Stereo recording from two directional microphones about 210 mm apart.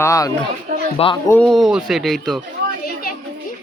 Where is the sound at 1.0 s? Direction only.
30° left (ahead or behind).